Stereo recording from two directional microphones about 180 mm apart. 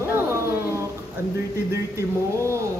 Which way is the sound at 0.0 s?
15° right (ahead or behind).